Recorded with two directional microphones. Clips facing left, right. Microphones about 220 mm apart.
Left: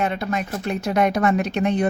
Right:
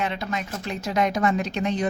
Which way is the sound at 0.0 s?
50° left (ahead or behind).